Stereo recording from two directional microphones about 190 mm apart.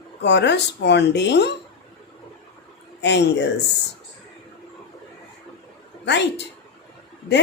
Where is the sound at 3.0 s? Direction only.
65° left (ahead or behind).